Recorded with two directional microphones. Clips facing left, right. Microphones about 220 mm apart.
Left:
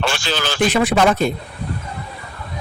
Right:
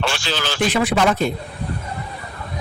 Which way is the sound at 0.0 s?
50° left (ahead or behind).